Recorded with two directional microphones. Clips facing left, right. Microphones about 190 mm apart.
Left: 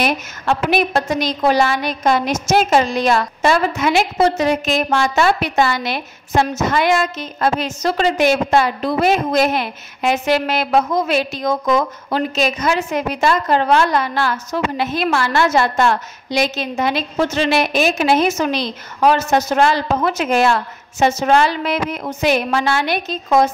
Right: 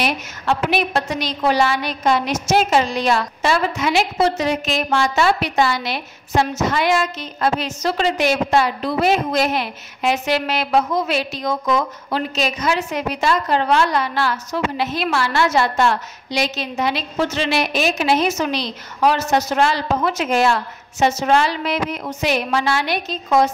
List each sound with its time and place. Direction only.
0.0 s a woman's voice: 45° left (ahead or behind)